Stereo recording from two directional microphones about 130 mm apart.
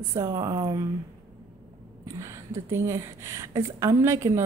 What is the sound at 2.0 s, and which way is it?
Speech, 20° right (ahead or behind).